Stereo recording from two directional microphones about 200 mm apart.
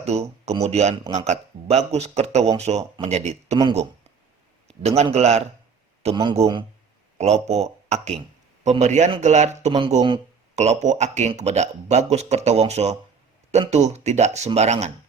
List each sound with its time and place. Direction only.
0.0 s speech: 35° right (ahead or behind)
4.8 s speech: 30° right (ahead or behind)